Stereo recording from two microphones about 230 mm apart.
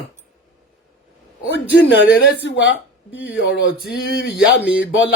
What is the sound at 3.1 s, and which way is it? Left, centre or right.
Speech, centre.